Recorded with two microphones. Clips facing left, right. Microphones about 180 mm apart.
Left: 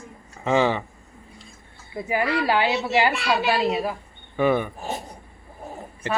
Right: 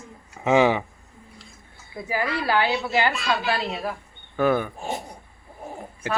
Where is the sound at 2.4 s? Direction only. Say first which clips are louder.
Left 1 dB; 15° left (ahead or behind); by 4.7 s centre (ahead or behind).